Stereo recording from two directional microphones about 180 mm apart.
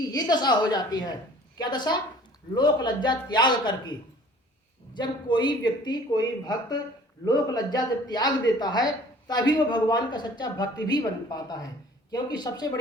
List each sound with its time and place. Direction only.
0.1 s a man's voice: 20° left (ahead or behind)
4.9 s a man's voice: 25° left (ahead or behind)